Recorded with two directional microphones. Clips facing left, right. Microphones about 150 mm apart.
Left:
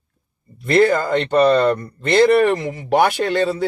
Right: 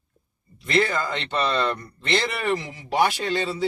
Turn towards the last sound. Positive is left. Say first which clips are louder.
# left 6 dB
turn(degrees=55)  # may be behind; listen again after turning